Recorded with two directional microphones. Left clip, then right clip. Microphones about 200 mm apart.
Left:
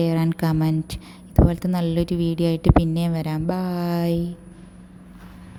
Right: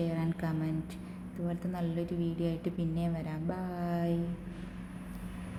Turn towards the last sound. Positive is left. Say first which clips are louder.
# left 10 dB
turn(degrees=45)  # may be behind; listen again after turning